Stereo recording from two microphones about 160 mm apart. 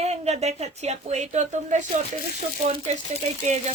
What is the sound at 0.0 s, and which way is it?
Speech, 45° right (ahead or behind).